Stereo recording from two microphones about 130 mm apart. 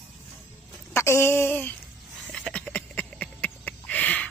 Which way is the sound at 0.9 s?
20° left (ahead or behind).